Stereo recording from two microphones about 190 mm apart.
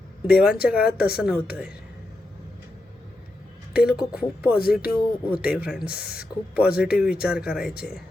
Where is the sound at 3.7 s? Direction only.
5° right (ahead or behind).